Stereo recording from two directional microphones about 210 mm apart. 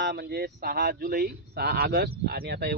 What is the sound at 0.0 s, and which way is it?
Speech, 50° right (ahead or behind).